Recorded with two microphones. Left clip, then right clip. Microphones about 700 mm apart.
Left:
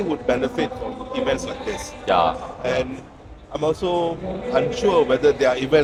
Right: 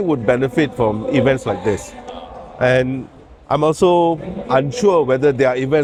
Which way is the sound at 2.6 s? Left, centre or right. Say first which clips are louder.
Right 9 dB; right.